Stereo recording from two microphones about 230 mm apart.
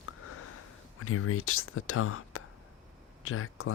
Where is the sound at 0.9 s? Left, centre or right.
Left.